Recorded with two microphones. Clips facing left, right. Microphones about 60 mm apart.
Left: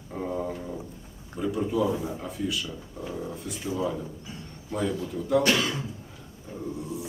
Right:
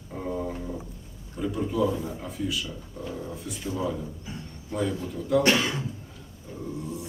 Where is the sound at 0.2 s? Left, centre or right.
Centre.